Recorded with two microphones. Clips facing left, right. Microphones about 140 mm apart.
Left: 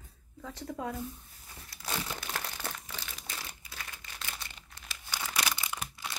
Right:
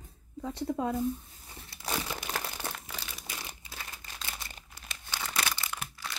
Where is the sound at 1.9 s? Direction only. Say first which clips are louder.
Right 2 dB; 10° right (ahead or behind).